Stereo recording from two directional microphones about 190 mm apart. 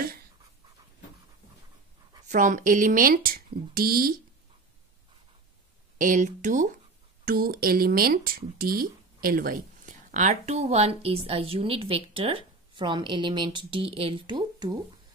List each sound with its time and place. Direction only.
2.2 s speech: 40° right (ahead or behind)
5.9 s speech: 40° right (ahead or behind)
7.2 s speech: 50° right (ahead or behind); by 14.8 s 20° right (ahead or behind)